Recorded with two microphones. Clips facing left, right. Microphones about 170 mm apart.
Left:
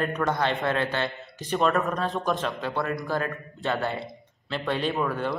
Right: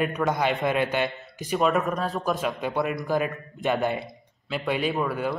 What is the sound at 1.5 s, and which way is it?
Speech, 5° right (ahead or behind).